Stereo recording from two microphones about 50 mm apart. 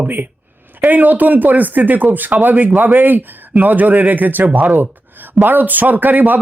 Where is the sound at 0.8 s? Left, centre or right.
Right.